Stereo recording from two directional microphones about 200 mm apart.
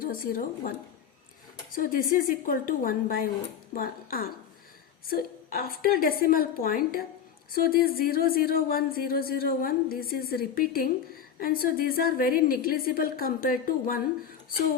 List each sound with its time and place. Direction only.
0.0 s speech: 45° left (ahead or behind)
1.7 s speech: 45° left (ahead or behind)